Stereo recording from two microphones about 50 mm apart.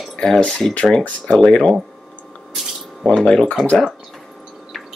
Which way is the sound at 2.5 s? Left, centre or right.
Centre.